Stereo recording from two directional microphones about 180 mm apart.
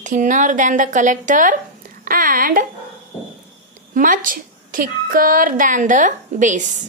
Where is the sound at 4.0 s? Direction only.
50° right (ahead or behind).